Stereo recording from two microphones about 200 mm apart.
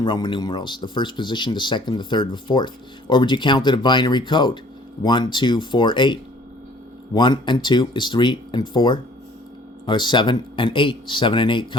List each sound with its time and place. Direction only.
0.0 s speech: 25° left (ahead or behind)